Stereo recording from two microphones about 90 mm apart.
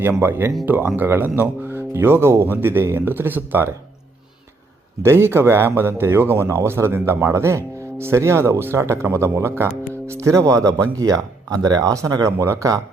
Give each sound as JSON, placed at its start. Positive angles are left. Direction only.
{"t": 0.2, "sound": "speech", "side_deg": -25}
{"t": 5.0, "sound": "speech", "side_deg": -25}